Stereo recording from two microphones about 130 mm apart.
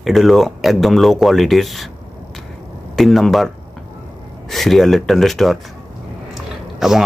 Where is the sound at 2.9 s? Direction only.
Centre (ahead or behind).